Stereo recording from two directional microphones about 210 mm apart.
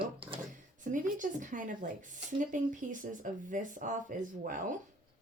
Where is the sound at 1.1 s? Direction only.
35° right (ahead or behind).